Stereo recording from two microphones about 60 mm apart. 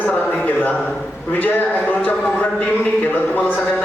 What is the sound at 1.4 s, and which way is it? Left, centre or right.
Speech, left.